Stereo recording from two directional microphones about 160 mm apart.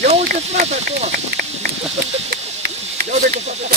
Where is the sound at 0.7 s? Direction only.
45° right (ahead or behind).